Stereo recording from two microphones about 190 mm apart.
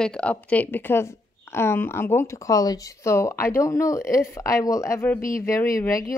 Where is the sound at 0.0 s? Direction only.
5° left (ahead or behind).